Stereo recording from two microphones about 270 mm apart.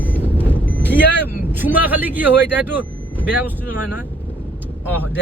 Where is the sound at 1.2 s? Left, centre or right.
Centre.